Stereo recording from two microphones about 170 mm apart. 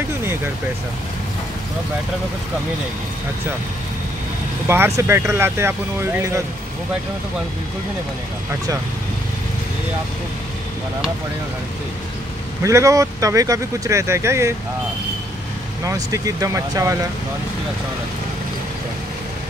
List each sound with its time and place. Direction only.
4.6 s speech: 15° right (ahead or behind)
12.6 s speech: 20° right (ahead or behind)
15.8 s speech: 20° right (ahead or behind)